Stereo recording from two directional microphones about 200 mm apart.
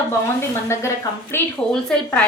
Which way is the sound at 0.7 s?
15° left (ahead or behind).